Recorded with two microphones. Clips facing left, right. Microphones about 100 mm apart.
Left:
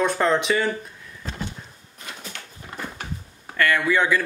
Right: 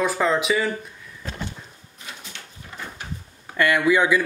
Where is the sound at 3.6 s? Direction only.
15° right (ahead or behind).